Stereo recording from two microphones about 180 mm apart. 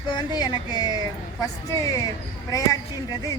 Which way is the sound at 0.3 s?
25° left (ahead or behind).